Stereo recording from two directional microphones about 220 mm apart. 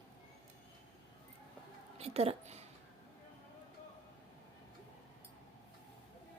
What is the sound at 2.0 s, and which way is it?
Speech, 30° right (ahead or behind).